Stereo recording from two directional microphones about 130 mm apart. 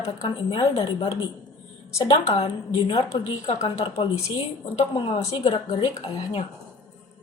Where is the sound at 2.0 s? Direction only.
50° left (ahead or behind).